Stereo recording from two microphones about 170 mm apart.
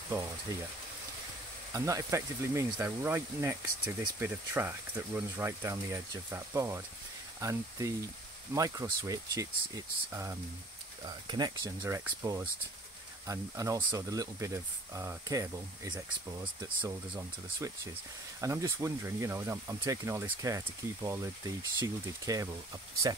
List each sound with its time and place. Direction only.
1.7 s speech: 20° right (ahead or behind)